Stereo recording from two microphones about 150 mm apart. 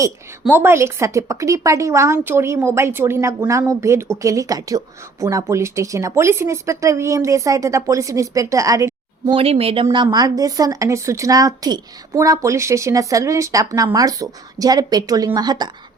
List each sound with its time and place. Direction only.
0.4 s speech: 15° right (ahead or behind)
9.3 s speech: 40° right (ahead or behind)
9.8 s speech: 30° right (ahead or behind)